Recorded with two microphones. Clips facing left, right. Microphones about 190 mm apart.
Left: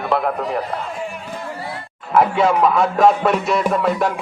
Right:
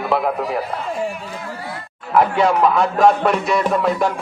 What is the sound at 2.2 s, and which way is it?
Music, centre (ahead or behind).